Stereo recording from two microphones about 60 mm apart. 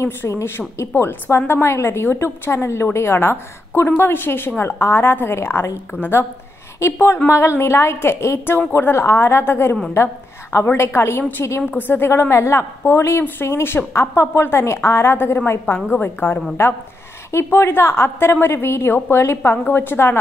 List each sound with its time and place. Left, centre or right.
0.0 s a woman's voice: left